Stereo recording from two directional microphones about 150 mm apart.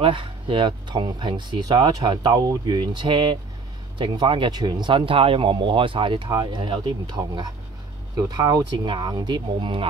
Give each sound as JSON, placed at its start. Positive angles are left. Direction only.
{"t": 0.0, "sound": "speech", "side_deg": -35}